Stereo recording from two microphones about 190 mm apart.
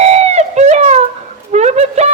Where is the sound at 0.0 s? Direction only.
35° right (ahead or behind).